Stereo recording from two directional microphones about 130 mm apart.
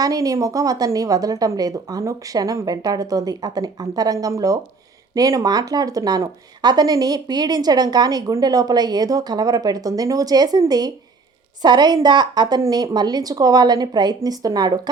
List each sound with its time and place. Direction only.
0.0 s a woman's voice: 25° right (ahead or behind)